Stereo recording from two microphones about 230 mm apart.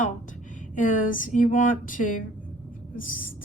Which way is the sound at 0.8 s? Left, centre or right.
Left.